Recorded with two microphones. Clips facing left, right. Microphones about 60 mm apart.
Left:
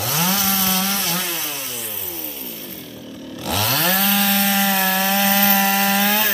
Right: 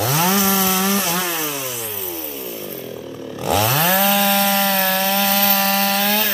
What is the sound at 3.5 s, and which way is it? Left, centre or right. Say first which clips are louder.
Chainsaw: right 4 dB; centre.